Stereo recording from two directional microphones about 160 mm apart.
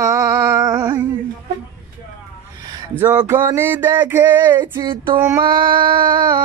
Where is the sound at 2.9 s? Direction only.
10° right (ahead or behind).